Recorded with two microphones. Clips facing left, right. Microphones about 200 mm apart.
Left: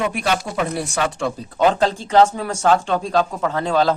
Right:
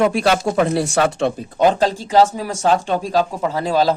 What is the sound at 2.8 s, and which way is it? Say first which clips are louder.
Speech: right 1 dB; 10° right (ahead or behind).